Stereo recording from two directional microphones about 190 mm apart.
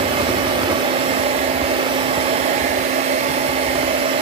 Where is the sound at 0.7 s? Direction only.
30° right (ahead or behind).